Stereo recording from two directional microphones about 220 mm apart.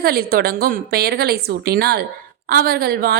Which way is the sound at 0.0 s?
45° right (ahead or behind).